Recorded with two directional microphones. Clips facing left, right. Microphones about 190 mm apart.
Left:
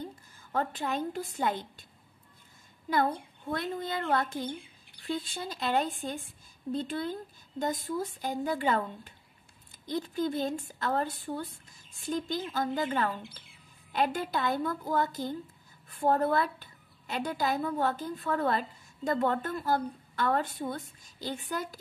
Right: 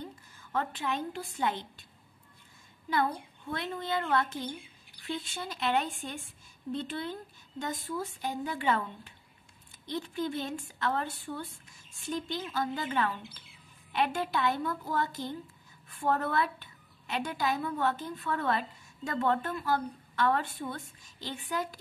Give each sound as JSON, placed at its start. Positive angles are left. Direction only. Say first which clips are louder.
{"t": 0.5, "sound": "a woman's voice", "louder": "left 1 dB", "side_deg": 40}
{"t": 3.4, "sound": "a woman's voice", "louder": "left 2 dB", "side_deg": 40}